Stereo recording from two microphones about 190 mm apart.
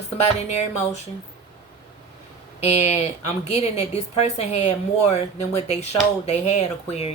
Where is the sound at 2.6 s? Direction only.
35° left (ahead or behind).